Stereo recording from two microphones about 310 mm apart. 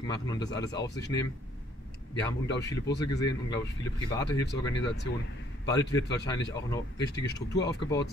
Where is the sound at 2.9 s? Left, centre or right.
Centre.